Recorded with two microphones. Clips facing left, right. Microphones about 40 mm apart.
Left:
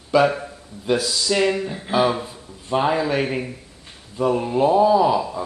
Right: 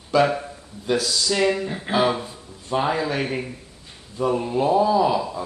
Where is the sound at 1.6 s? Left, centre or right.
Centre.